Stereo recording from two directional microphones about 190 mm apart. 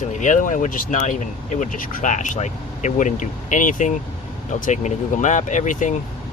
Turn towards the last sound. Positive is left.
turn(degrees=40)  # may be behind; listen again after turning